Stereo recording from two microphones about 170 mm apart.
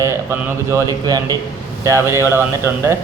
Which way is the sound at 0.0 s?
15° right (ahead or behind).